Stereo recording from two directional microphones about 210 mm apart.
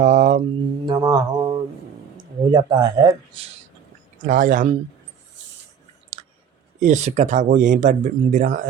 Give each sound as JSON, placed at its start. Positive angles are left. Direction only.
{"t": 0.0, "sound": "mantra", "side_deg": -35}
{"t": 0.9, "sound": "mantra", "side_deg": -15}
{"t": 2.5, "sound": "speech", "side_deg": -20}
{"t": 4.2, "sound": "speech", "side_deg": -40}
{"t": 6.7, "sound": "speech", "side_deg": -35}